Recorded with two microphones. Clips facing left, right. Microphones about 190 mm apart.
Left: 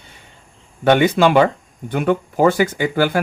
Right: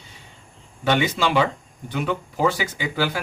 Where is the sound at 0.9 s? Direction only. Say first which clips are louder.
Left 8 dB; 55° left (ahead or behind).